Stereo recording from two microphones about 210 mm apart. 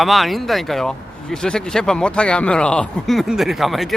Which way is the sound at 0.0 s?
Centre (ahead or behind).